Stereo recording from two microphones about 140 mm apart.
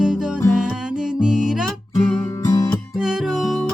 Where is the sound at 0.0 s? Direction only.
5° right (ahead or behind).